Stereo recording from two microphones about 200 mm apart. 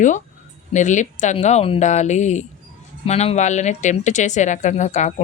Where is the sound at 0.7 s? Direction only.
35° left (ahead or behind).